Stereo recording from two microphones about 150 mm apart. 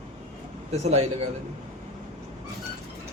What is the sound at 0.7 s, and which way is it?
Speech, 45° right (ahead or behind).